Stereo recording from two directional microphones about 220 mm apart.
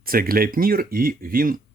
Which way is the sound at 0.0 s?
40° right (ahead or behind).